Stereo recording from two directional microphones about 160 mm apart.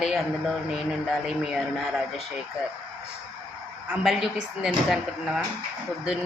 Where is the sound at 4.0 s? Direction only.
Centre (ahead or behind).